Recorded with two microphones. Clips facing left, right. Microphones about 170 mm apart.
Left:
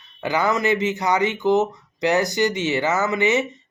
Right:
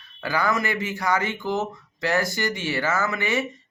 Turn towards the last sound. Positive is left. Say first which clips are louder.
# left 5 dB
turn(degrees=20)  # may be behind; listen again after turning